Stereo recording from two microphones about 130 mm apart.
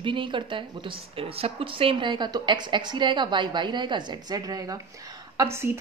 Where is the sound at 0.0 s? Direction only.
40° right (ahead or behind).